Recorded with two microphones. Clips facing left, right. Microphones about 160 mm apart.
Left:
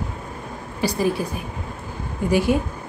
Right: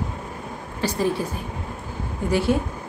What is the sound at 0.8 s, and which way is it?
Speech, 10° left (ahead or behind).